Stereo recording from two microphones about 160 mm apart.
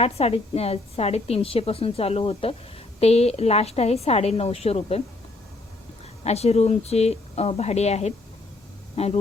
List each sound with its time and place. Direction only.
0.0 s speech: 40° left (ahead or behind)
6.2 s speech: 40° left (ahead or behind)